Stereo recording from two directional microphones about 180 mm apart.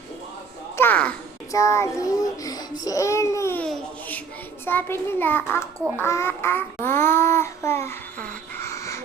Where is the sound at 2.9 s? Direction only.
15° left (ahead or behind).